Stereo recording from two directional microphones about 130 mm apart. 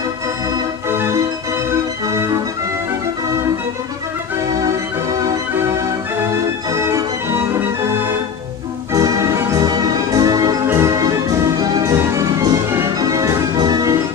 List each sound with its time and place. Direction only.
0.8 s organ: 20° right (ahead or behind)
5.2 s organ: 30° right (ahead or behind)
8.9 s music: 25° right (ahead or behind)